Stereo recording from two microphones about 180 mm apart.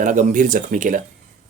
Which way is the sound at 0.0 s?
45° right (ahead or behind).